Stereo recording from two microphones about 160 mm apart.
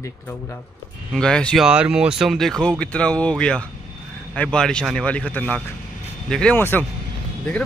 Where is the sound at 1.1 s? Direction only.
5° left (ahead or behind).